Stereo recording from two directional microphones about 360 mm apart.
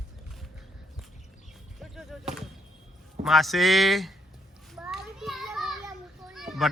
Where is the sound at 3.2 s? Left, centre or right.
Centre.